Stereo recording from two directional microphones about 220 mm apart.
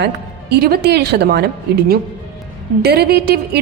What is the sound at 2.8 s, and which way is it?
Speech, 45° right (ahead or behind).